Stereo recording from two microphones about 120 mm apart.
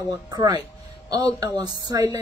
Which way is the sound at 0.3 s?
35° right (ahead or behind).